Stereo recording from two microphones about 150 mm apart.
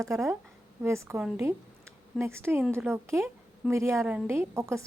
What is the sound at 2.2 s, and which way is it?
A woman's voice, 15° right (ahead or behind).